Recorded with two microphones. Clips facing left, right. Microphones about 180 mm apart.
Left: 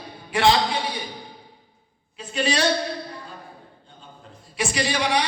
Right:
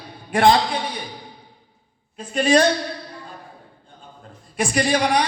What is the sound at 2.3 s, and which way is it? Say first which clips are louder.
Speech: right 7 dB; 50° right (ahead or behind).